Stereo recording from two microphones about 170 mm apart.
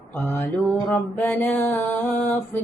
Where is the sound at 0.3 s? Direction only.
10° left (ahead or behind).